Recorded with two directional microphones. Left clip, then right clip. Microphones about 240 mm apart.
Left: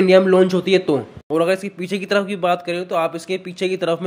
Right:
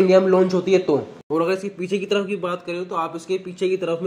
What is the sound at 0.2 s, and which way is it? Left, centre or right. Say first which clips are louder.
Speech: left 3 dB; left.